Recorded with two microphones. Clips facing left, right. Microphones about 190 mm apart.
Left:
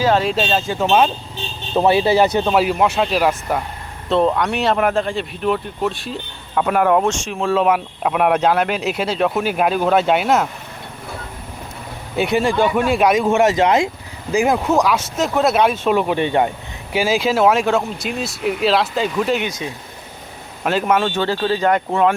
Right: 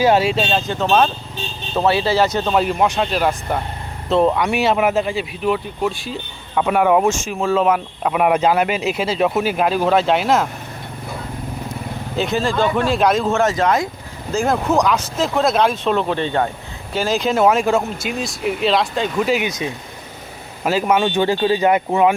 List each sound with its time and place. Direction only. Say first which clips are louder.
0.0 s speech: right 2 dB; 15° right (ahead or behind)
0.3 s speech: even; centre (ahead or behind)
2.5 s speech: left 1 dB; 5° left (ahead or behind)
12.1 s speech: left 2 dB; 10° left (ahead or behind)
14.5 s speech: even; 5° left (ahead or behind)
20.7 s speech: right 1 dB; 5° right (ahead or behind)